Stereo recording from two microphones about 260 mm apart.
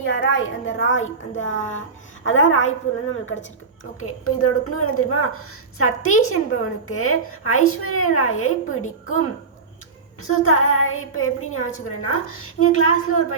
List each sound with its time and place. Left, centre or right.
0.0 s a woman's voice: left
4.0 s a woman's voice: left
10.4 s a woman's voice: left